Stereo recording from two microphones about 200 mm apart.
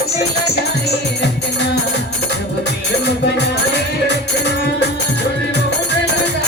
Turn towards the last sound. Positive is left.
turn(degrees=60)  # may be behind; listen again after turning